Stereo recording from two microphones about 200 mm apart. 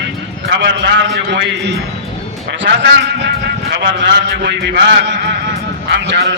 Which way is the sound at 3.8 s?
65° right (ahead or behind).